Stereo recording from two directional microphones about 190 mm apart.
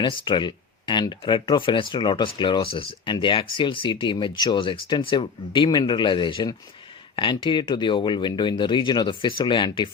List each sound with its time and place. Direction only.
0.0 s speech: 25° left (ahead or behind)